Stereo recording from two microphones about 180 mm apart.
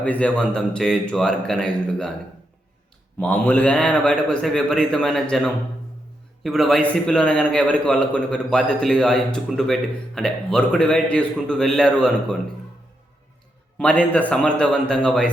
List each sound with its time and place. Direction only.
0.0 s a man's voice: 5° left (ahead or behind)
3.2 s a man's voice: 10° left (ahead or behind)
13.7 s a man's voice: 10° left (ahead or behind)